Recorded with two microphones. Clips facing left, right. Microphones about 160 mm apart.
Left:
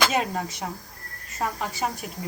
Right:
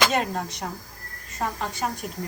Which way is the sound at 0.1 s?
5° left (ahead or behind).